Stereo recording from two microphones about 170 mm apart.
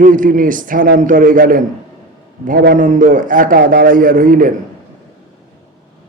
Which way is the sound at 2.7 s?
50° right (ahead or behind).